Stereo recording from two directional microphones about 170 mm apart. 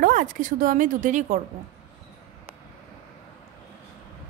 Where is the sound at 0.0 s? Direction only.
50° right (ahead or behind).